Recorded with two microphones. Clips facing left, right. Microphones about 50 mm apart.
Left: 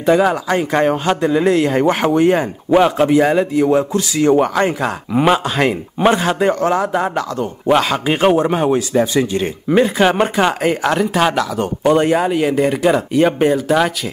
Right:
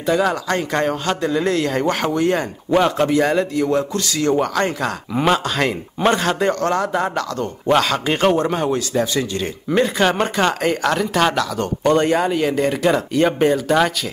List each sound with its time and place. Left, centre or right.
0.0 s a man's voice: centre